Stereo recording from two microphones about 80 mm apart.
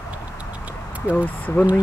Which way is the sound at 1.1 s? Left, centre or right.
Left.